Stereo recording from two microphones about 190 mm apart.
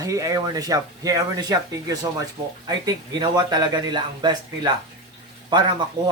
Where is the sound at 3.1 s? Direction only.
20° right (ahead or behind).